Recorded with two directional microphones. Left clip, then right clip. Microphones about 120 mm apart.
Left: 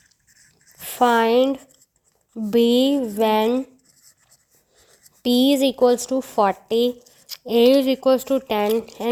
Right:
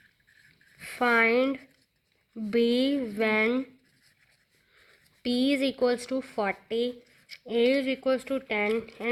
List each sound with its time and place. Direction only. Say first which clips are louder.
0.8 s a sound: left 6 dB; 30° left (ahead or behind)
2.5 s speech: left 8 dB; 35° left (ahead or behind)
5.2 s speech: left 9 dB; 40° left (ahead or behind)